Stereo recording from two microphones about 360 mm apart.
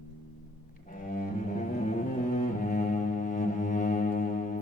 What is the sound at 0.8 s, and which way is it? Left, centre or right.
Cello, left.